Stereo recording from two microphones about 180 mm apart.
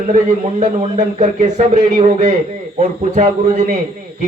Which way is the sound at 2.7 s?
35° right (ahead or behind).